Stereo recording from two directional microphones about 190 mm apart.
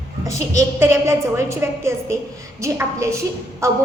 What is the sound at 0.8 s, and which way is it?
A child's voice, 15° right (ahead or behind).